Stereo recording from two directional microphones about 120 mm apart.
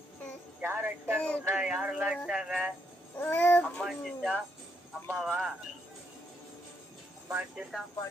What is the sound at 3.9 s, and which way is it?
Music, centre (ahead or behind).